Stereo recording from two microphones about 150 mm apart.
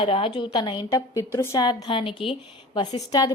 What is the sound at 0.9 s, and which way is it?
A woman's voice, 20° left (ahead or behind).